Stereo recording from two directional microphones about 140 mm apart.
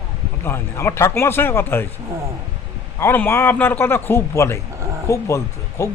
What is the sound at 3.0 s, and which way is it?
A man's voice, 15° left (ahead or behind).